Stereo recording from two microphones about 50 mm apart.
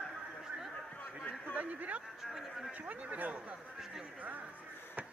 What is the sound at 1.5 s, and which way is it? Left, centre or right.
Speech, right.